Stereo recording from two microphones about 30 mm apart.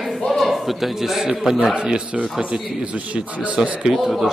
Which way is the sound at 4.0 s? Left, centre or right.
Centre.